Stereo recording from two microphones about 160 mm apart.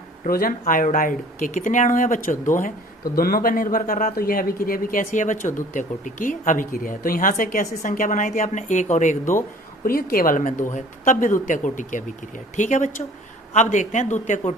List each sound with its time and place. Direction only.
0.3 s speech: 65° left (ahead or behind)
0.6 s speech: 55° left (ahead or behind)
9.8 s speech: 65° left (ahead or behind)